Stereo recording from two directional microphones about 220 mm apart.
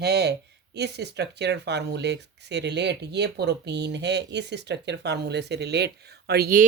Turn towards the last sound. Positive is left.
turn(degrees=-40)  # may be behind; listen again after turning